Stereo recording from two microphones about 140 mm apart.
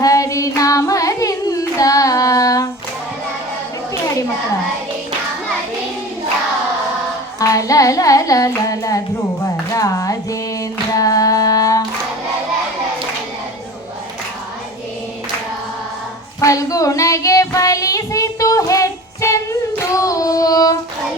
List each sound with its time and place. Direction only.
0.0 s carnatic music: 25° left (ahead or behind)
7.3 s child singing: 25° left (ahead or behind)
9.4 s music: 25° left (ahead or behind)
10.9 s singing: 25° left (ahead or behind)
16.4 s child singing: 25° left (ahead or behind)